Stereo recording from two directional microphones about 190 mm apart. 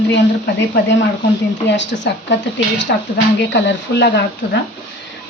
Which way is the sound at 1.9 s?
55° left (ahead or behind).